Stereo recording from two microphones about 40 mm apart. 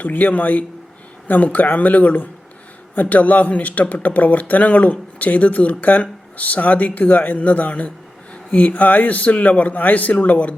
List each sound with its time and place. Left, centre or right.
0.0 s speech: left